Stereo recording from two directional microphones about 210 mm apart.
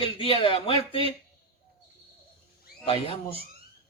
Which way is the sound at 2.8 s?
25° left (ahead or behind).